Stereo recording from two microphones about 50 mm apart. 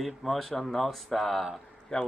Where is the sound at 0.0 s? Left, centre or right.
Centre.